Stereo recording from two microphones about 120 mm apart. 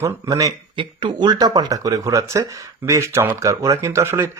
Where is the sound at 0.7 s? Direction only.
45° right (ahead or behind).